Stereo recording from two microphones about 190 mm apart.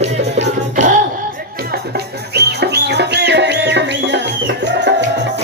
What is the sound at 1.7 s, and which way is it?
Music, 55° right (ahead or behind).